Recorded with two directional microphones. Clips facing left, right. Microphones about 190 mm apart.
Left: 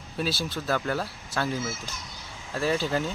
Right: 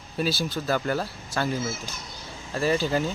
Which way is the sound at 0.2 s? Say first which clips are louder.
Right 3 dB; centre (ahead or behind).